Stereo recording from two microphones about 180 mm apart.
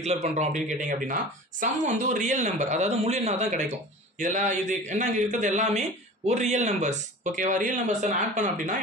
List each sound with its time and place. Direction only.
0.0 s a man's voice: 40° right (ahead or behind)